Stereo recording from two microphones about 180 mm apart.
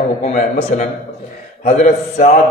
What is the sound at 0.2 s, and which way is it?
A man's voice, 40° left (ahead or behind).